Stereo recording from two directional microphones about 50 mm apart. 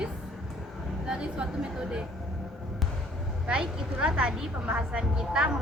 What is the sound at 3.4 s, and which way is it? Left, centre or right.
A woman's voice, centre.